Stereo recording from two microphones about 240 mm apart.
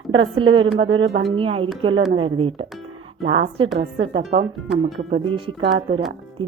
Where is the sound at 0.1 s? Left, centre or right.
Right.